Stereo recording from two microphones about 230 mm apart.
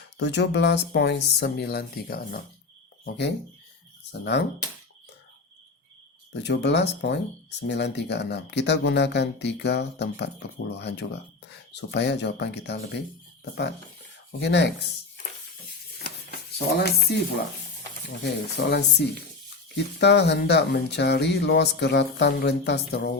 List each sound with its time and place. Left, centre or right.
0.2 s speech: left
6.3 s speech: left
14.3 s speech: left
16.6 s speech: left
18.2 s speech: left